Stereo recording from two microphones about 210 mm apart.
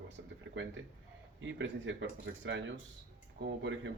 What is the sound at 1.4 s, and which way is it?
Speech, 65° right (ahead or behind).